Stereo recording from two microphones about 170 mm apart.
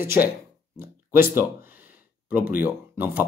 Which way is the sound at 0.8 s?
15° right (ahead or behind).